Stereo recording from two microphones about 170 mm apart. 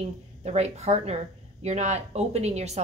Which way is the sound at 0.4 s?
40° right (ahead or behind).